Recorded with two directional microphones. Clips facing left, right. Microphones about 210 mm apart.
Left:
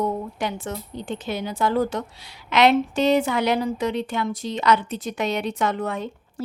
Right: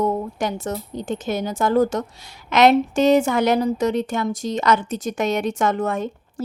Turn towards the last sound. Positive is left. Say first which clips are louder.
# right 4 dB
turn(degrees=-45)  # may be behind; listen again after turning